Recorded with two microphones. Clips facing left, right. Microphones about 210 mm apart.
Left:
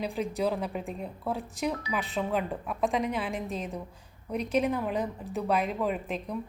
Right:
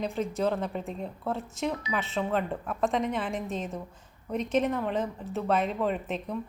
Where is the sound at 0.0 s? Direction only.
10° left (ahead or behind).